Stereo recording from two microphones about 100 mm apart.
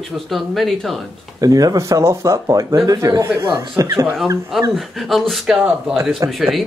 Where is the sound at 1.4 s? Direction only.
35° right (ahead or behind).